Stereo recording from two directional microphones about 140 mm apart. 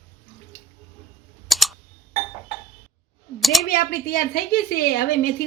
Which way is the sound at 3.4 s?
Centre (ahead or behind).